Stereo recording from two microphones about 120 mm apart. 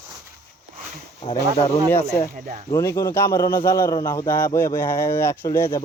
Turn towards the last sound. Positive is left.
turn(degrees=25)  # may be behind; listen again after turning